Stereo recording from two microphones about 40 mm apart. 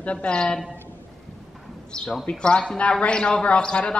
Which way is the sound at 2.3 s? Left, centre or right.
Left.